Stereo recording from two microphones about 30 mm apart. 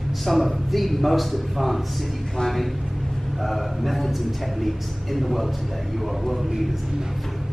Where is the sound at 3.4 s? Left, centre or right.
Centre.